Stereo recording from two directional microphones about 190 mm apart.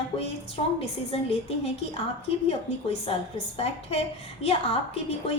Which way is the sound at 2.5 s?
30° left (ahead or behind).